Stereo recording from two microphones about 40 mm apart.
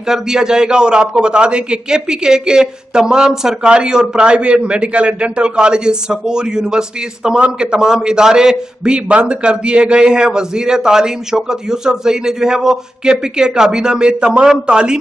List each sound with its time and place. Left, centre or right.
0.0 s a man's voice: centre